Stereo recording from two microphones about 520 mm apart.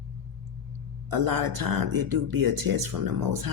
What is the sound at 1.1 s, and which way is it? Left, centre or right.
Speech, right.